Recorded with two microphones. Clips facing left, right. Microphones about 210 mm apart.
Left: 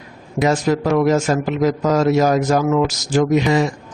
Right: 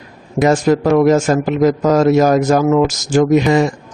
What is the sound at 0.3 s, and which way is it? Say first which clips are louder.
A man's voice: right 4 dB; 50° right (ahead or behind).